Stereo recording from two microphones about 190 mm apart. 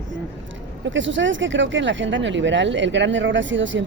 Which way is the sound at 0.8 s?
75° right (ahead or behind).